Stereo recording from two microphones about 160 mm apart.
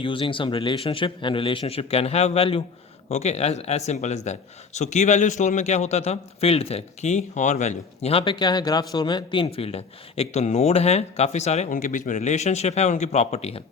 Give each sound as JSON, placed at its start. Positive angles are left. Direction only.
{"t": 0.0, "sound": "a man's voice", "side_deg": 30}